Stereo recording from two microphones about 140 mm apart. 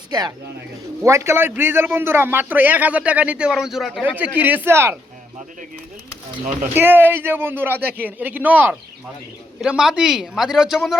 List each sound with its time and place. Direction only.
0.1 s a man's voice: 30° right (ahead or behind); by 4.0 s centre (ahead or behind)
4.0 s a man's voice: 10° right (ahead or behind)
6.7 s a man's voice: 15° right (ahead or behind)